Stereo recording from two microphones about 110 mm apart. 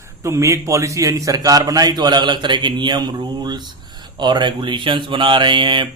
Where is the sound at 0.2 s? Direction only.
25° right (ahead or behind).